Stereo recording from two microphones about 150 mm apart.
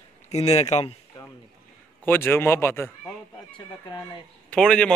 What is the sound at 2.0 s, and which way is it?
Speech, 15° left (ahead or behind).